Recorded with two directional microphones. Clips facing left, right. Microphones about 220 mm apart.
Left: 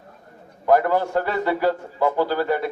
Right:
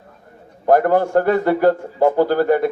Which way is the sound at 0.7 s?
50° right (ahead or behind).